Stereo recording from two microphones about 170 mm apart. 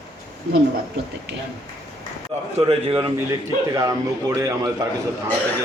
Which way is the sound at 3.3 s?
20° right (ahead or behind).